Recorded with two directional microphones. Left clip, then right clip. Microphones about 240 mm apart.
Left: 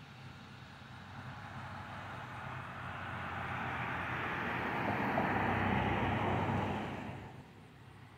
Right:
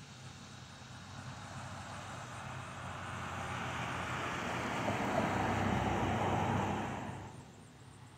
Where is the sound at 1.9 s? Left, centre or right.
Right.